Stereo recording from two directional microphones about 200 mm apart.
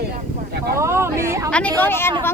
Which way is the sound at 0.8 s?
15° right (ahead or behind).